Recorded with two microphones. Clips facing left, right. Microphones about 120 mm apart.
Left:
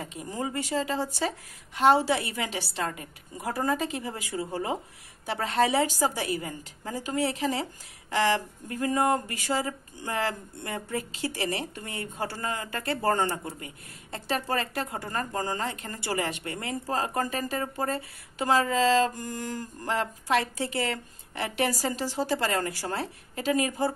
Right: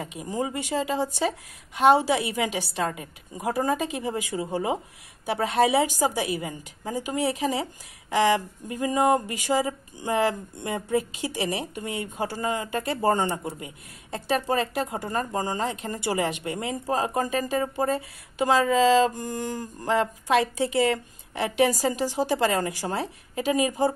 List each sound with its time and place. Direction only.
0.0 s speech: 15° right (ahead or behind)